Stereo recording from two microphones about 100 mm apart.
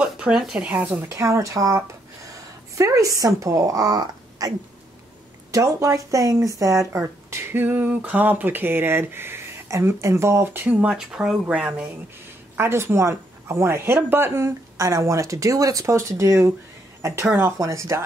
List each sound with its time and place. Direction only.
0.0 s speech: 5° right (ahead or behind)
12.5 s speech: 25° right (ahead or behind)